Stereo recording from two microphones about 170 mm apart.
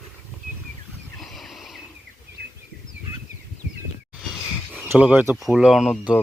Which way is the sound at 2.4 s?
70° right (ahead or behind).